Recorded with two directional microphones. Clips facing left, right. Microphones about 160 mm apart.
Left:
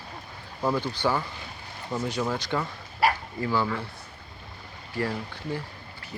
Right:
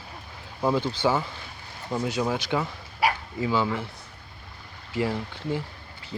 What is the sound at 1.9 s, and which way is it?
Speech, 15° right (ahead or behind).